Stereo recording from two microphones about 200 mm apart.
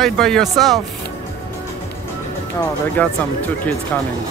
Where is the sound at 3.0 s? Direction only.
10° left (ahead or behind).